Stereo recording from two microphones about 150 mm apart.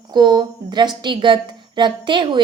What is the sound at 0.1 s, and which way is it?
A woman's voice, 30° right (ahead or behind).